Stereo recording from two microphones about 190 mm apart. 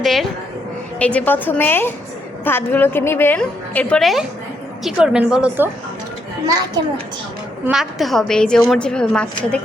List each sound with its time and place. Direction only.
0.0 s a woman's voice: centre (ahead or behind)
6.5 s a child's voice: 20° right (ahead or behind)
7.7 s a woman's voice: centre (ahead or behind)